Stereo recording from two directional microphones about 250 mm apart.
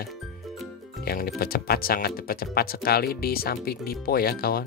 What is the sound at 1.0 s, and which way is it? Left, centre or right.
Speech, left.